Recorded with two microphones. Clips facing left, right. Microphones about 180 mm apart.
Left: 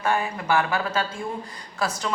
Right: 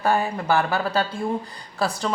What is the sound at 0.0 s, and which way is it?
Speech, 35° right (ahead or behind).